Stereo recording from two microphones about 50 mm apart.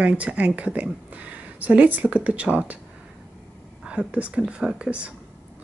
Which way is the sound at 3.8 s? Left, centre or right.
Right.